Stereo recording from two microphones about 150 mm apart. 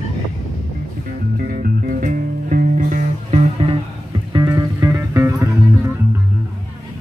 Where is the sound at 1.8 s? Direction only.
65° right (ahead or behind).